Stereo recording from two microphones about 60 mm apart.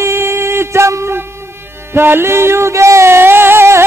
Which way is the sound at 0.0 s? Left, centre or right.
Right.